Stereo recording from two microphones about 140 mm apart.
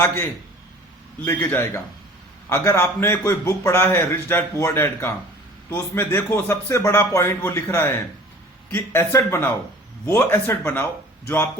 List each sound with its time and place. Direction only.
1.2 s a man's voice: 15° left (ahead or behind)